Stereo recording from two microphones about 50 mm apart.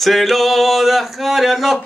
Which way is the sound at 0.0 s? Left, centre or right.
Centre.